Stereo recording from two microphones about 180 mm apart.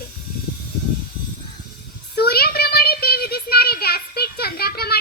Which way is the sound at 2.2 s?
60° left (ahead or behind).